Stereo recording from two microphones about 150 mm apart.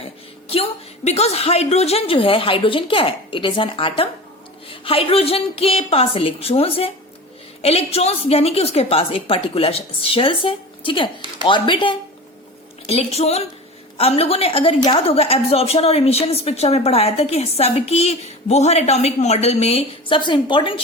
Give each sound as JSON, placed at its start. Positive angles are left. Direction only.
{"t": 0.4, "sound": "a woman's voice", "side_deg": 40}